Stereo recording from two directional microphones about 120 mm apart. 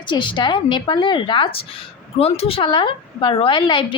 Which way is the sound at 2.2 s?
60° left (ahead or behind).